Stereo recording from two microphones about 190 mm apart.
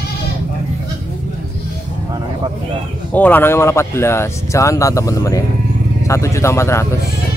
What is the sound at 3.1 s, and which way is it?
Speech, 10° left (ahead or behind).